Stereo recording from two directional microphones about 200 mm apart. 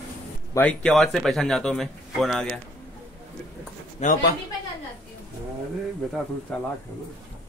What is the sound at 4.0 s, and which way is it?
Speech, 35° left (ahead or behind).